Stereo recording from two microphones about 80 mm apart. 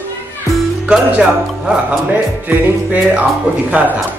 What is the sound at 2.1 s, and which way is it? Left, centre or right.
Music, centre.